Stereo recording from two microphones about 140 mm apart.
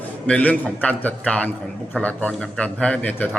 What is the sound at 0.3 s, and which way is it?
A man's voice, 10° left (ahead or behind).